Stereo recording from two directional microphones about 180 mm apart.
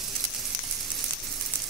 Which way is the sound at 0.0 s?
Centre (ahead or behind).